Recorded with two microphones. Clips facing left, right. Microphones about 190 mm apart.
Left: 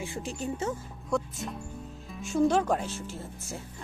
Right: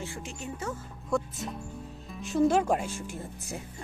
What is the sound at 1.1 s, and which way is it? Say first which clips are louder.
Speech: even; centre (ahead or behind).